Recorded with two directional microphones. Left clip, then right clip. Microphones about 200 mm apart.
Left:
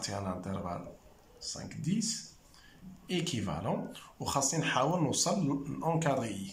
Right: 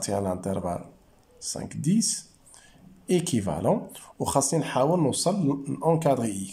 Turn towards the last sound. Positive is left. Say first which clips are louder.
# right 8 dB
turn(degrees=-30)  # may be behind; listen again after turning